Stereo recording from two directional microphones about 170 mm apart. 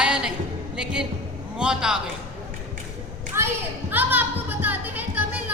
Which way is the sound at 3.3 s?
15° right (ahead or behind).